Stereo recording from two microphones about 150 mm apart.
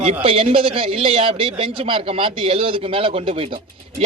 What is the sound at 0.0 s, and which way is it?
Speech, 40° right (ahead or behind).